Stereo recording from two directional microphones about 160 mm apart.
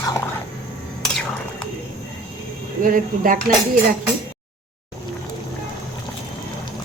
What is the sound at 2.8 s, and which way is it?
Speech, 60° right (ahead or behind).